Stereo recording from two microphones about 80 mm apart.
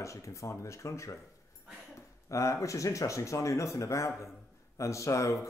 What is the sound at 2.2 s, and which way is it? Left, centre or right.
Speech, left.